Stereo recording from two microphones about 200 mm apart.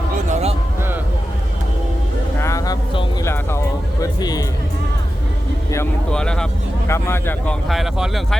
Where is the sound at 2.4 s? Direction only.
15° left (ahead or behind).